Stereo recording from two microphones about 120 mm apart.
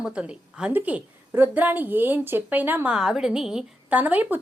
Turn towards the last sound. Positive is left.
turn(degrees=-15)  # may be behind; listen again after turning